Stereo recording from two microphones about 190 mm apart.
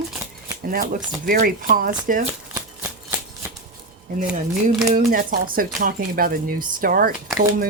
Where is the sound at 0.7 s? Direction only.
50° right (ahead or behind).